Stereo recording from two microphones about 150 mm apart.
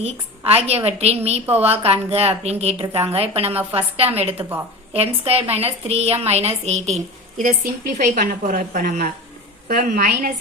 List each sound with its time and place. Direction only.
0.0 s a woman's voice: 45° right (ahead or behind)
7.4 s a woman's voice: 65° right (ahead or behind)